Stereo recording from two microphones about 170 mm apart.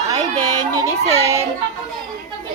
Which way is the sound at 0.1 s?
25° right (ahead or behind).